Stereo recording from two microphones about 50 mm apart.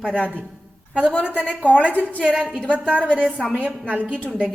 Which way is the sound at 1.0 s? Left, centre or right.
Left.